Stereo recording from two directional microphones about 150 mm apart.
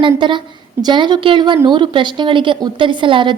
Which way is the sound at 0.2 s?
30° right (ahead or behind).